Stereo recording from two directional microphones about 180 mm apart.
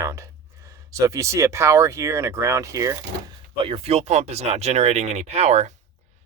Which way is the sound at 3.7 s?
35° right (ahead or behind).